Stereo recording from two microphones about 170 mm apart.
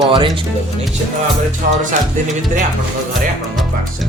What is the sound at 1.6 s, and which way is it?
Music, 55° right (ahead or behind).